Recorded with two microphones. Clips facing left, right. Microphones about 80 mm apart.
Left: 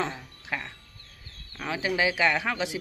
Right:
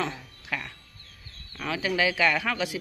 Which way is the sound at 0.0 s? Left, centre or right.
Left.